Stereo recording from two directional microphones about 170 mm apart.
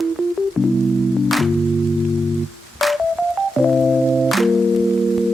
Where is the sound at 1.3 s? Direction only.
Centre (ahead or behind).